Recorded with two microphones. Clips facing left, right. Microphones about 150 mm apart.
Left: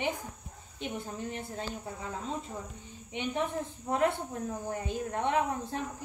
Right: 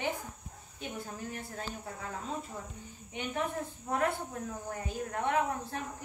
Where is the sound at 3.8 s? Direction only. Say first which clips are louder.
Left 3 dB; 20° left (ahead or behind).